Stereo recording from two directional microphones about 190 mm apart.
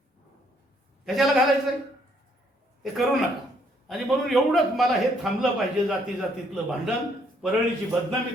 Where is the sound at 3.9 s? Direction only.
Centre (ahead or behind).